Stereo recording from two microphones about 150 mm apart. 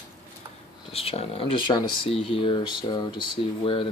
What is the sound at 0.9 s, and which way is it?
Speech, 40° left (ahead or behind).